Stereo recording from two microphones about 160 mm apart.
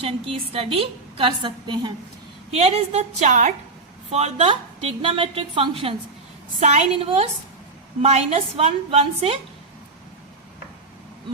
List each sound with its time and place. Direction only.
0.0 s a woman's voice: 35° right (ahead or behind)